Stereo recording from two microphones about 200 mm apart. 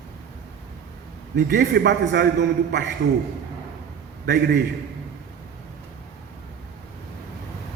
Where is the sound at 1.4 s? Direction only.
60° right (ahead or behind).